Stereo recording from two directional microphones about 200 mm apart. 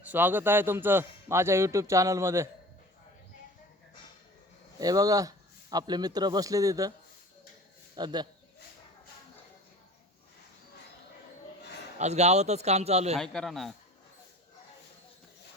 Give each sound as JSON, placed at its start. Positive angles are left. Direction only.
{"t": 0.0, "sound": "a man's voice", "side_deg": -10}
{"t": 4.8, "sound": "a man's voice", "side_deg": -20}
{"t": 7.9, "sound": "a man's voice", "side_deg": -20}
{"t": 11.9, "sound": "a man's voice", "side_deg": -35}
{"t": 13.1, "sound": "a man's voice", "side_deg": 0}